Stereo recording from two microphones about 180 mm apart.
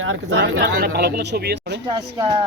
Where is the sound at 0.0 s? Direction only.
90° right.